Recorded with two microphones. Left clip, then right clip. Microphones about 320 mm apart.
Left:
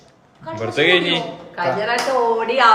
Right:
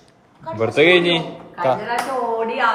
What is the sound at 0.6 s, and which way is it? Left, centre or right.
Speech, centre.